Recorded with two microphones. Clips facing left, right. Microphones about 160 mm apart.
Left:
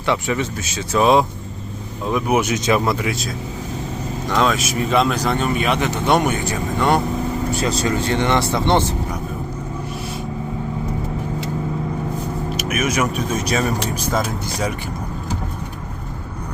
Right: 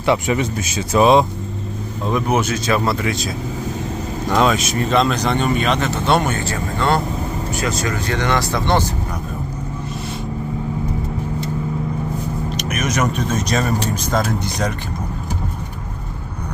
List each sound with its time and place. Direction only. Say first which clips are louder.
0.0 s speech: right 3 dB; 15° right (ahead or behind)
2.0 s speech: even; 5° left (ahead or behind)
4.3 s speech: right 2 dB; 5° right (ahead or behind)
4.6 s speech: right 1 dB; 5° left (ahead or behind)
7.5 s speech: left 1 dB; 30° left (ahead or behind)
12.5 s speech: left 1 dB; 5° left (ahead or behind)